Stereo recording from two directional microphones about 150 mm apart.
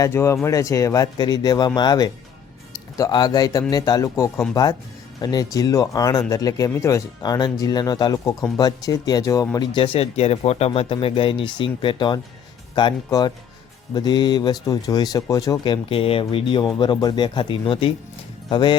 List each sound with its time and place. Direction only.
0.0 s speech: 20° left (ahead or behind)
9.7 s speech: 35° left (ahead or behind)